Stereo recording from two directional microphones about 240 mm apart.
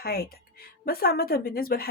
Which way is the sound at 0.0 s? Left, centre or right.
Left.